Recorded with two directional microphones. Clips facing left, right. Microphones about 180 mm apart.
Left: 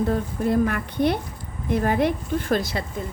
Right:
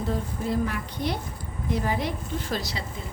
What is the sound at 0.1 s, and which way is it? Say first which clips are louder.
Speech: left 5 dB; 55° left (ahead or behind).